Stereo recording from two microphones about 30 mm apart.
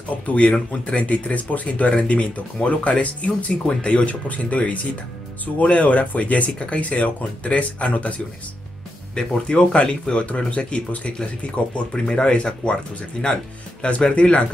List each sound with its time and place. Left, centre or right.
0.1 s speech: left
6.6 s speech: left
9.1 s speech: left
12.1 s speech: left
13.8 s speech: left